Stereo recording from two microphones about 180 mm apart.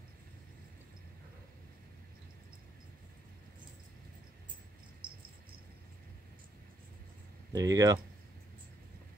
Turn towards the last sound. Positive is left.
turn(degrees=-20)  # may be behind; listen again after turning